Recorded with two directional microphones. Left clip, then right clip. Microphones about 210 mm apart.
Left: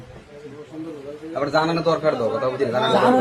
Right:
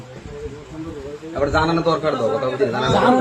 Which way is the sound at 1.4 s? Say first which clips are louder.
Right 2 dB; 20° left (ahead or behind).